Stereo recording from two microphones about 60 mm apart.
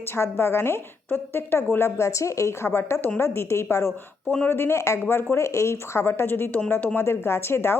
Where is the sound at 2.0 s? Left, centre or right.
Left.